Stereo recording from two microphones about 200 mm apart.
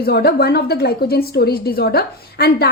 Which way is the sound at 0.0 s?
55° left (ahead or behind).